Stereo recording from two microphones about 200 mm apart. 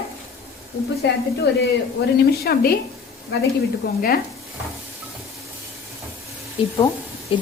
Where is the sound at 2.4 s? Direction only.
50° left (ahead or behind).